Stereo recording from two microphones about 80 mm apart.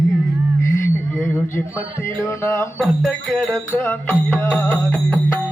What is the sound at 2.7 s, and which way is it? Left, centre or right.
Music, centre.